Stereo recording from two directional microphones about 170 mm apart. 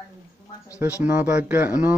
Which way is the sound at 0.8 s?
10° right (ahead or behind).